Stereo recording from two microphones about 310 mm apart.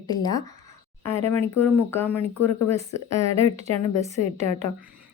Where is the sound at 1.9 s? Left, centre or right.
Centre.